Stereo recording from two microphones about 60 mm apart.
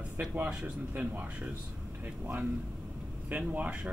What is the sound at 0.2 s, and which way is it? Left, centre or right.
Speech, right.